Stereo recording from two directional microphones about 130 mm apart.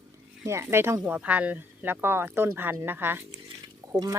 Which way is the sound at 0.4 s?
20° right (ahead or behind).